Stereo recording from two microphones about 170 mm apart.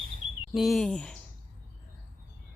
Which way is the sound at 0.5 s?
Centre (ahead or behind).